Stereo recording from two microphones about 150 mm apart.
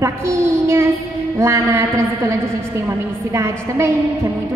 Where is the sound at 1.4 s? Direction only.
20° right (ahead or behind).